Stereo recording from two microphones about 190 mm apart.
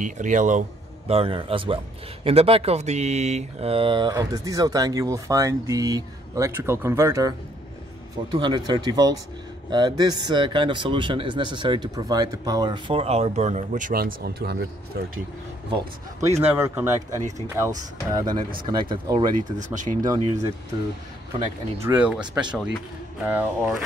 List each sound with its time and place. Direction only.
0.0 s a man's voice: 40° right (ahead or behind); by 14.7 s 60° right (ahead or behind)
16.2 s speech: 15° right (ahead or behind)
19.3 s speech: 45° right (ahead or behind)
21.8 s speech: 10° right (ahead or behind)